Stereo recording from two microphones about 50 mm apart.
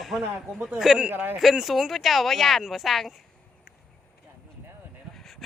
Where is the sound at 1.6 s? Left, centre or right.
Centre.